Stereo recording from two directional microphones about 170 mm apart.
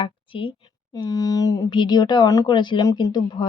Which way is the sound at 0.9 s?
20° left (ahead or behind).